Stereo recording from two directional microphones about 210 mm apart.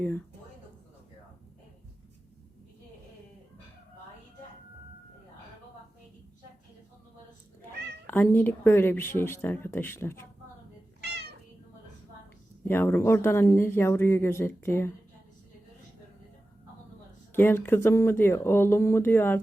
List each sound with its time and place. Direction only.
8.0 s speech: 10° left (ahead or behind)
11.0 s cat: 50° right (ahead or behind)
12.6 s speech: 10° left (ahead or behind)
17.3 s speech: 10° left (ahead or behind)